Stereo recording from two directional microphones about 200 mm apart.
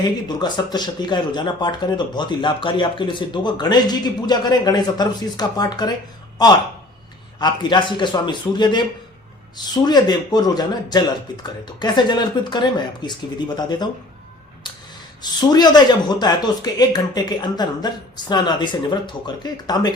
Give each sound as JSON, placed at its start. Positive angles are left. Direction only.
{"t": 0.3, "sound": "speech", "side_deg": 20}
{"t": 15.2, "sound": "speech", "side_deg": 20}